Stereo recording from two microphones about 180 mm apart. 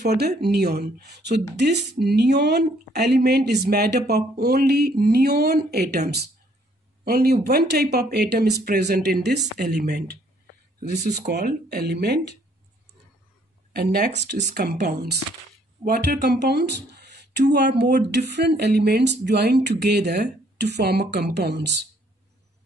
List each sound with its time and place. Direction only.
0.0 s speech: 65° right (ahead or behind)
11.2 s speech: 65° right (ahead or behind)
13.7 s speech: 60° right (ahead or behind)